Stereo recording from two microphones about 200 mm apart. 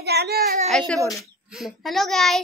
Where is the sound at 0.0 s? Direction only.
55° right (ahead or behind).